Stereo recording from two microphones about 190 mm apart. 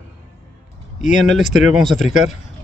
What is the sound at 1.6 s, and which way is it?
Speech, centre (ahead or behind).